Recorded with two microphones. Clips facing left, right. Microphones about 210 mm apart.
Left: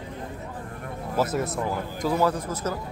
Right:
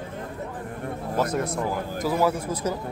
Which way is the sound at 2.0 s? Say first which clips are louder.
Even; 10° right (ahead or behind).